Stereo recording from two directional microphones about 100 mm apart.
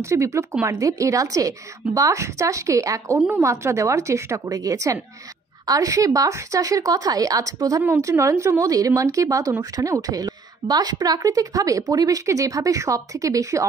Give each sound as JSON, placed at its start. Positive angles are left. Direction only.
{"t": 0.0, "sound": "a woman's voice", "side_deg": -30}